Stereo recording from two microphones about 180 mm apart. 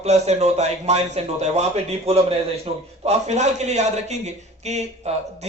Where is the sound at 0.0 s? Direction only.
35° right (ahead or behind).